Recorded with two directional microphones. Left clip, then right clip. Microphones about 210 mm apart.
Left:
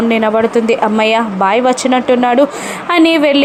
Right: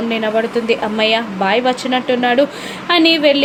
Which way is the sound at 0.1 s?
20° left (ahead or behind).